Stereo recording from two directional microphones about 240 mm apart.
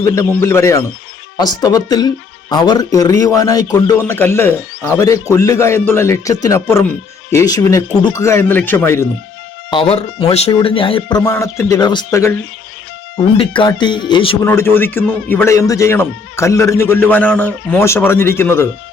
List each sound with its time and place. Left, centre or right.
0.0 s a man's voice: centre
9.6 s speech: left
14.4 s a man's voice: centre